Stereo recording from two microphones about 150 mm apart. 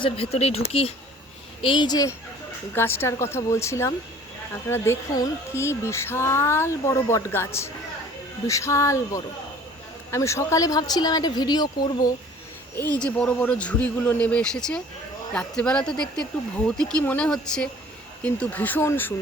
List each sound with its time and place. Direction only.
0.0 s speech: 40° left (ahead or behind)
1.6 s a woman's voice: 30° left (ahead or behind)
12.7 s speech: 10° left (ahead or behind)